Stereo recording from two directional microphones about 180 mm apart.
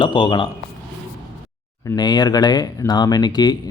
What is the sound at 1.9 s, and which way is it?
Speech, 20° left (ahead or behind).